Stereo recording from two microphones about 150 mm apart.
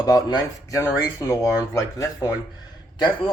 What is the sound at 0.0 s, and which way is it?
Speech, 25° left (ahead or behind).